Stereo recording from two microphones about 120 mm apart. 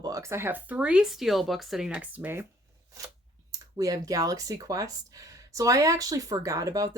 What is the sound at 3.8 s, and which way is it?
Speech, 30° right (ahead or behind).